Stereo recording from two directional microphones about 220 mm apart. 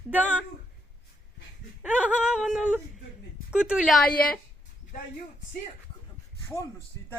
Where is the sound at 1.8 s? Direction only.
5° right (ahead or behind).